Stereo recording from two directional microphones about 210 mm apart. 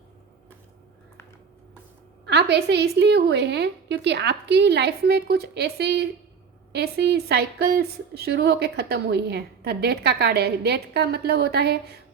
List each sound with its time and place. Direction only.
2.2 s a woman's voice: 55° right (ahead or behind)